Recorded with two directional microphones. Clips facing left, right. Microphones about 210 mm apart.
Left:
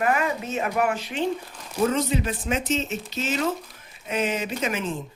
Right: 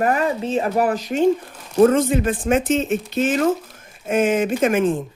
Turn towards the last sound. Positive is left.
turn(degrees=-50)  # may be behind; listen again after turning